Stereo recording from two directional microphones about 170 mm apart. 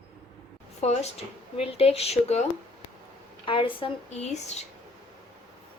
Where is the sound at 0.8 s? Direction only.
40° left (ahead or behind).